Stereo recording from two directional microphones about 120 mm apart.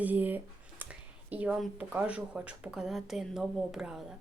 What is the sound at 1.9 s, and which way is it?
Speech, 10° right (ahead or behind).